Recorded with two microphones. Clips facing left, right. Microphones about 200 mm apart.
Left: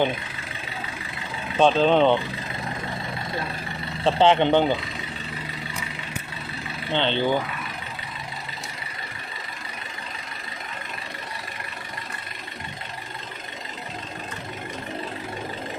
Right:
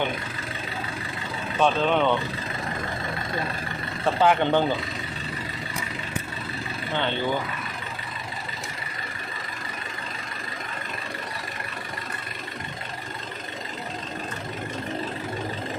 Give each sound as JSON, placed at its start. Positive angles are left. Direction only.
{"t": 1.5, "sound": "speech", "side_deg": 30}
{"t": 4.0, "sound": "speech", "side_deg": 25}
{"t": 6.9, "sound": "speech", "side_deg": 25}